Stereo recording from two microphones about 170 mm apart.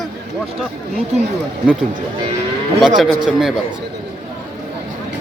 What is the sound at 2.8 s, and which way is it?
Speech, centre (ahead or behind).